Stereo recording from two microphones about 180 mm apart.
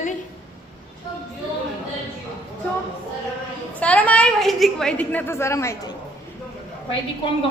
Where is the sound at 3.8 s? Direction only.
5° left (ahead or behind).